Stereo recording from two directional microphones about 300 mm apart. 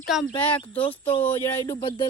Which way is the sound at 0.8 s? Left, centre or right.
Centre.